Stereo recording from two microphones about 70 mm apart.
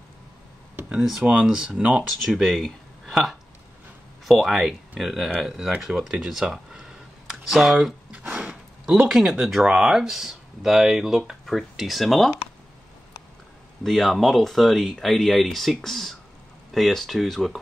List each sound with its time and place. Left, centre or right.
1.0 s speech: centre
2.0 s speech: centre
4.3 s speech: centre
8.1 s a sound: centre
9.1 s speech: centre
13.8 s speech: centre